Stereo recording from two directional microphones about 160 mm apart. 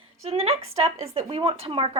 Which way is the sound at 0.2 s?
40° right (ahead or behind).